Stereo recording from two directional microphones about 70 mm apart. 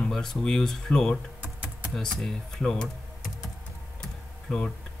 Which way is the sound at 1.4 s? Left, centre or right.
Centre.